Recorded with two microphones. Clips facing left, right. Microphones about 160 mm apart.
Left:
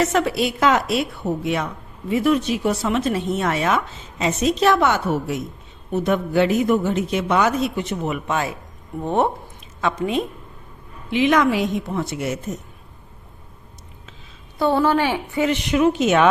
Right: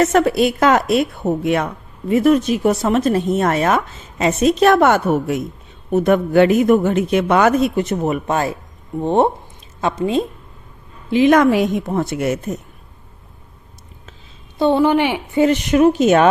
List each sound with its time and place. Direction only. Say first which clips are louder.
0.0 s a woman's voice: right 5 dB; 45° right (ahead or behind)
9.0 s a woman's voice: right 5 dB; 30° right (ahead or behind)
11.1 s a woman's voice: right 5 dB; 45° right (ahead or behind)
14.6 s a woman's voice: right 4 dB; 20° right (ahead or behind)
15.4 s a woman's voice: right 6 dB; 45° right (ahead or behind)